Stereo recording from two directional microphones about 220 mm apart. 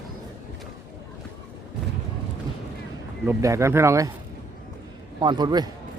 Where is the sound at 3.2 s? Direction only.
15° right (ahead or behind).